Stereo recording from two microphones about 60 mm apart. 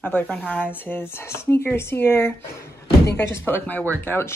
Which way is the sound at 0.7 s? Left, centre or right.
Left.